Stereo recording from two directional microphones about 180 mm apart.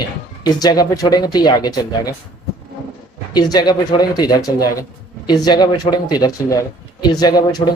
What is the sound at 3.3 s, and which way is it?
Speech, 20° left (ahead or behind).